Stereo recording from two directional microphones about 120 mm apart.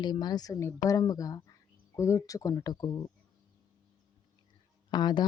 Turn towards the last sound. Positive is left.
turn(degrees=35)  # may be behind; listen again after turning